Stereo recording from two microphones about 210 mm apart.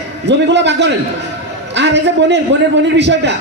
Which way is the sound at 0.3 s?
55° right (ahead or behind).